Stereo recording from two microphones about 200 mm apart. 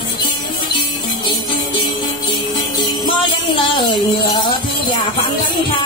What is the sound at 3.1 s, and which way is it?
Music, 25° left (ahead or behind).